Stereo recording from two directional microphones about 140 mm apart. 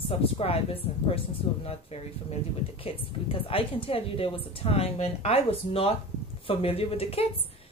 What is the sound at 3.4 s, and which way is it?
Speech, 40° left (ahead or behind).